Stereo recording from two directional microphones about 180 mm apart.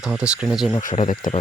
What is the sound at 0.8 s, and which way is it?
Speech, 45° left (ahead or behind).